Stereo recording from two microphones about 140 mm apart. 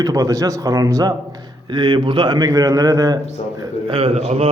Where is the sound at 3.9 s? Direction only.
40° right (ahead or behind).